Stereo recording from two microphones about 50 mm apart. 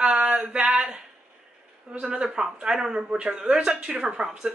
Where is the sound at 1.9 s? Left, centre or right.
Centre.